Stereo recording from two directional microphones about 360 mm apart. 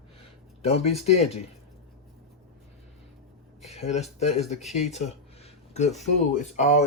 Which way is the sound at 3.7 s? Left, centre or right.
Centre.